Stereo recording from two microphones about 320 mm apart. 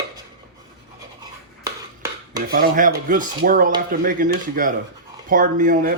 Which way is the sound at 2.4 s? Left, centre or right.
Right.